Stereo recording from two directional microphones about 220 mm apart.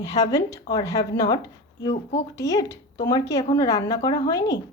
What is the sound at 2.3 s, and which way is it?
Speech, 15° left (ahead or behind).